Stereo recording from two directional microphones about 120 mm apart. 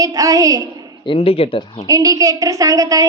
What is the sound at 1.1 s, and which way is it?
Speech, 55° left (ahead or behind).